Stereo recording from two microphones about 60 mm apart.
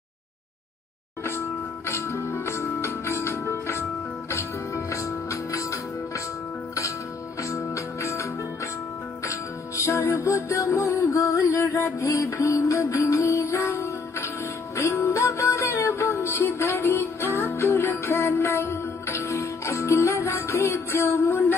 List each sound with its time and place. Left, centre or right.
1.9 s music: left
7.3 s music: left